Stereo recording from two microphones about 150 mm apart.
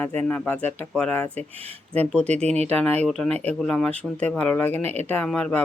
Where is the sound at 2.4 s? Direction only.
45° right (ahead or behind).